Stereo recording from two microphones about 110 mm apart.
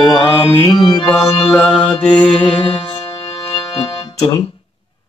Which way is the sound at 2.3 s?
50° left (ahead or behind).